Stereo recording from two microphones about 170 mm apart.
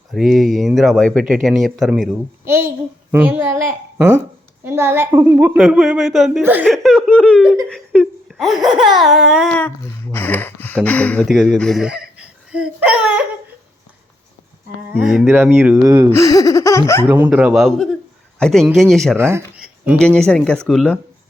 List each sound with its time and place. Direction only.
0.1 s speech: centre (ahead or behind)
2.5 s a woman's voice: 15° right (ahead or behind)
6.7 s speech: centre (ahead or behind)
7.1 s a sound: 10° left (ahead or behind)
7.7 s laughter: centre (ahead or behind)
9.0 s a sound: centre (ahead or behind)
11.3 s speech: centre (ahead or behind)
15.0 s a woman's voice: 5° right (ahead or behind)
16.1 s speech: 20° left (ahead or behind)
17.1 s a woman's voice: 10° right (ahead or behind)
19.1 s a woman's voice: 15° right (ahead or behind)
19.6 s a sound: 5° right (ahead or behind)
20.0 s speech: 5° left (ahead or behind)